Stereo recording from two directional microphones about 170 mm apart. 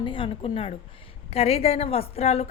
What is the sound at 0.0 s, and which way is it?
A woman's voice, 30° left (ahead or behind).